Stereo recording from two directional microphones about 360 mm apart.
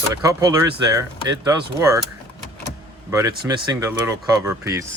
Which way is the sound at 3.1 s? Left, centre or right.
Centre.